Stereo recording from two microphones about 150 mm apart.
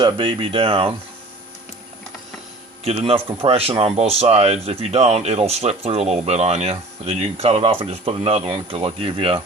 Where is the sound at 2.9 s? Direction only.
40° right (ahead or behind).